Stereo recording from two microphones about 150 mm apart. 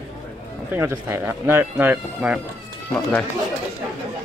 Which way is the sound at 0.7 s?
15° right (ahead or behind).